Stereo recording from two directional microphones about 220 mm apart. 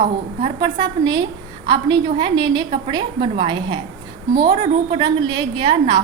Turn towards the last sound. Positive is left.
turn(degrees=-20)  # may be behind; listen again after turning